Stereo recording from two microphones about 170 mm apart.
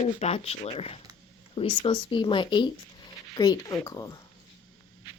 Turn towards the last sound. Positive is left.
turn(degrees=20)  # may be behind; listen again after turning